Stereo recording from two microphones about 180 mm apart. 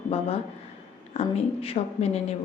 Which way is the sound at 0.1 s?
35° left (ahead or behind).